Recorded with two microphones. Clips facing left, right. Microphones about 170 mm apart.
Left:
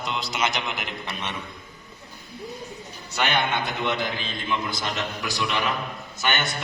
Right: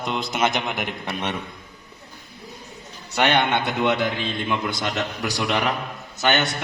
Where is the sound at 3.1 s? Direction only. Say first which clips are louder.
Right 5 dB; 65° right (ahead or behind).